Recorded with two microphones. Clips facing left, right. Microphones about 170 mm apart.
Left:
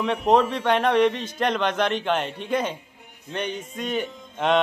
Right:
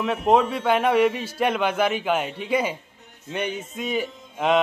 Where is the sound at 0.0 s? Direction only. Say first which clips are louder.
Even; centre (ahead or behind).